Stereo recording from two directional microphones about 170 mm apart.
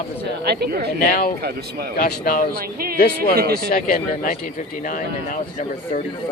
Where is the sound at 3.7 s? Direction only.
55° left (ahead or behind).